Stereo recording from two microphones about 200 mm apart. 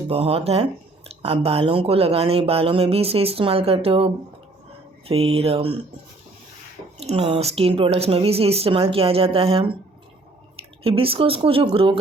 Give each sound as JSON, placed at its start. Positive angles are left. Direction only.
{"t": 0.1, "sound": "speech", "side_deg": -30}
{"t": 7.0, "sound": "speech", "side_deg": -30}
{"t": 10.8, "sound": "speech", "side_deg": -30}